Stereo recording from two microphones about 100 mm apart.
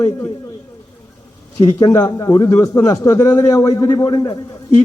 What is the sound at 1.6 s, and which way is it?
A man's voice, 35° left (ahead or behind).